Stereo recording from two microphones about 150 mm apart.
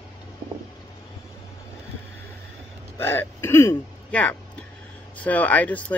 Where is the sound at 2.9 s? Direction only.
15° left (ahead or behind).